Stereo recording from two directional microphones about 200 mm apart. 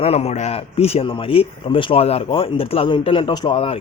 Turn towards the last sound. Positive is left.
turn(degrees=30)  # may be behind; listen again after turning